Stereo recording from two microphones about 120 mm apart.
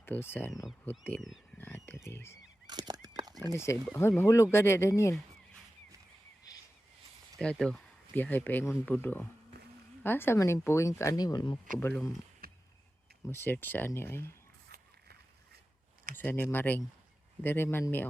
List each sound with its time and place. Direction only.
0.0 s speech: 20° left (ahead or behind)
2.6 s fowl: 35° right (ahead or behind)
3.5 s speech: 20° left (ahead or behind)
7.5 s speech: 5° left (ahead or behind); by 11.5 s 35° left (ahead or behind)
11.8 s speech: 20° left (ahead or behind)
13.2 s speech: 20° left (ahead or behind)
16.1 s speech: 15° left (ahead or behind)